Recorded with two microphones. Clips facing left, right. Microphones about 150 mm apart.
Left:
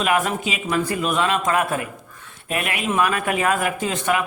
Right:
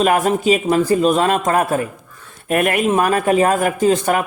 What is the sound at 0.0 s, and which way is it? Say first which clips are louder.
Speech: right 6 dB; 40° right (ahead or behind).